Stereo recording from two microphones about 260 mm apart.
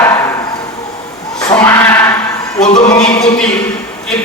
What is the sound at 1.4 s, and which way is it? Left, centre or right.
Bleat, centre.